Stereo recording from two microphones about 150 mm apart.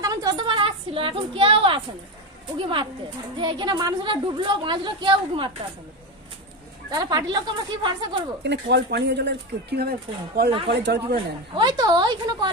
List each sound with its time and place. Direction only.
0.0 s a sound: 25° right (ahead or behind)
3.3 s a woman's voice: 30° right (ahead or behind)
6.9 s speech: 25° right (ahead or behind)
8.6 s speech: 90° right
11.5 s speech: 25° right (ahead or behind)